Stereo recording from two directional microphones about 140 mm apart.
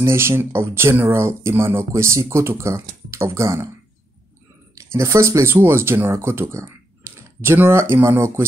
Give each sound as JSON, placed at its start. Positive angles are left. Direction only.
{"t": 0.0, "sound": "speech", "side_deg": -20}
{"t": 4.7, "sound": "speech", "side_deg": -20}